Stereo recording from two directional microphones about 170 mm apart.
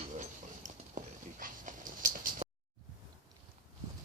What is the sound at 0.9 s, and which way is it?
Dog, 50° right (ahead or behind).